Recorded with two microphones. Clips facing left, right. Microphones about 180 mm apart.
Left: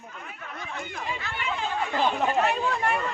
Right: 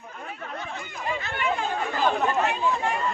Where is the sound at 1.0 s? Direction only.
50° right (ahead or behind).